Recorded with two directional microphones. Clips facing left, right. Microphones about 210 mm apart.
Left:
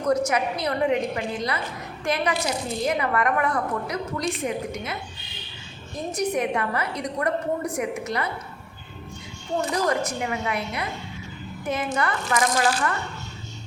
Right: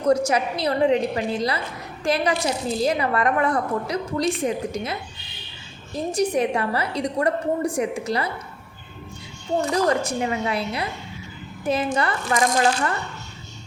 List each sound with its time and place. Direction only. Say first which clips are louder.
0.1 s a woman's voice: right 3 dB; 30° right (ahead or behind)
6.1 s a woman's voice: right 3 dB; 30° right (ahead or behind)
10.0 s speech: right 3 dB; 30° right (ahead or behind)